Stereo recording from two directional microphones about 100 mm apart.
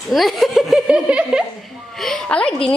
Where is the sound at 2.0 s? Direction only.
5° left (ahead or behind).